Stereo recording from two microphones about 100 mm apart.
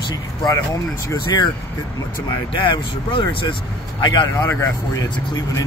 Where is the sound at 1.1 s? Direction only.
45° left (ahead or behind).